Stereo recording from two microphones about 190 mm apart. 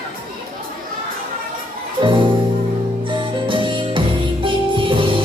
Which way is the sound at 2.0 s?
25° right (ahead or behind).